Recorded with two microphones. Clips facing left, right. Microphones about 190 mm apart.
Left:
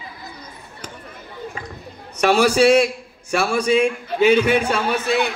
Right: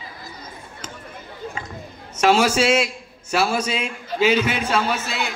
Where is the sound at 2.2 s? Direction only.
60° left (ahead or behind).